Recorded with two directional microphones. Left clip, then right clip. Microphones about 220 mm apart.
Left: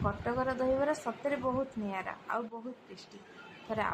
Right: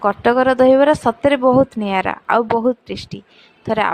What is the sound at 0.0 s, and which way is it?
A woman's voice, 40° right (ahead or behind).